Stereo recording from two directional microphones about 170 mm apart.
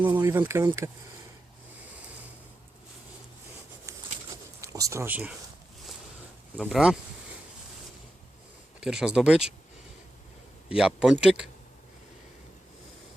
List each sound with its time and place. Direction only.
0.0 s speech: 25° right (ahead or behind)
4.6 s speech: 20° right (ahead or behind)
6.6 s speech: 5° right (ahead or behind)
8.8 s speech: 5° right (ahead or behind)
10.7 s speech: 5° right (ahead or behind)